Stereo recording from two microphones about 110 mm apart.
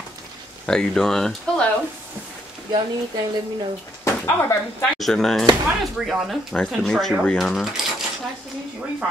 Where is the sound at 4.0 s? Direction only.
25° left (ahead or behind).